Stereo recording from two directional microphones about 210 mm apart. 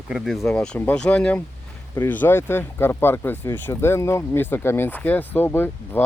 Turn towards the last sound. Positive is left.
turn(degrees=10)  # may be behind; listen again after turning